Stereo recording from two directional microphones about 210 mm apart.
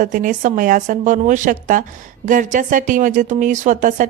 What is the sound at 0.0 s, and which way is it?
Speech, 40° right (ahead or behind).